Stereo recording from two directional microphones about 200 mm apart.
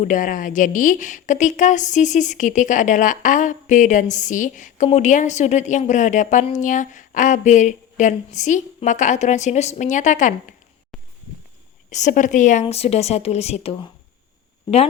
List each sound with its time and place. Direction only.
0.0 s a woman's voice: 40° left (ahead or behind)
11.9 s a woman's voice: 35° left (ahead or behind)